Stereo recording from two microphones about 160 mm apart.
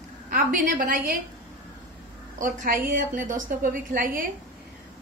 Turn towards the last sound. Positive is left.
turn(degrees=-60)  # may be behind; listen again after turning